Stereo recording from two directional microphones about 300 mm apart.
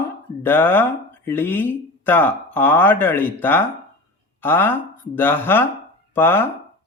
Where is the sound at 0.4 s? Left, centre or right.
Centre.